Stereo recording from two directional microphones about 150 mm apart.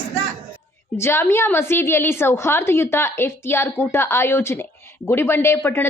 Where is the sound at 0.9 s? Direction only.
15° left (ahead or behind).